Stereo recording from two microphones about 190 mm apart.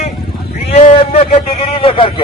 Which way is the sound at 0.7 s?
35° left (ahead or behind).